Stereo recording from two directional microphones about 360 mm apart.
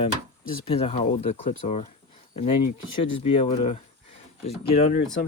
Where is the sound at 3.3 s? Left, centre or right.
Centre.